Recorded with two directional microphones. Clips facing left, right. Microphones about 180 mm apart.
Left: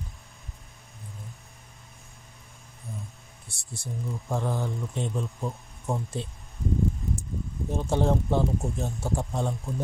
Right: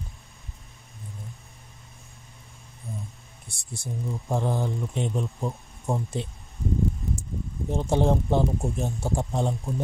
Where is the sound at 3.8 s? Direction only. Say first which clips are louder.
Right 2 dB; 20° right (ahead or behind).